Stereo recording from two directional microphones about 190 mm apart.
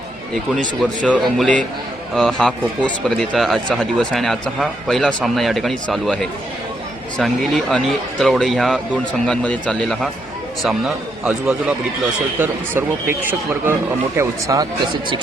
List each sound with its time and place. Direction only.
0.8 s speech: 5° left (ahead or behind); by 13.1 s 10° right (ahead or behind)
14.2 s speech: 15° right (ahead or behind)